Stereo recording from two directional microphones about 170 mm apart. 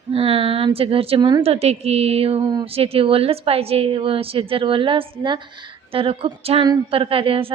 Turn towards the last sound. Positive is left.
turn(degrees=-30)  # may be behind; listen again after turning